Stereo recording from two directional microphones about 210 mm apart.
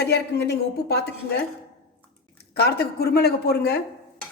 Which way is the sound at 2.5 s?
50° left (ahead or behind).